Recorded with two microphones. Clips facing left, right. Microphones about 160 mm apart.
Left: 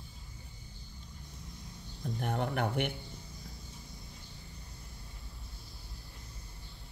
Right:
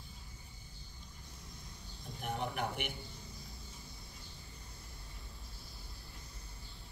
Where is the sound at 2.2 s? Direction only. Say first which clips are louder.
Left 4 dB; 60° left (ahead or behind).